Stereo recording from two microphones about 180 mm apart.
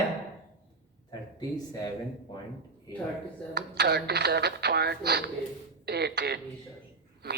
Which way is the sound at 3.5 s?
70° right (ahead or behind).